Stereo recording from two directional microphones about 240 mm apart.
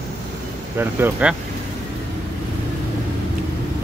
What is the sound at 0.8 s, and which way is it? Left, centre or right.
Speech, centre.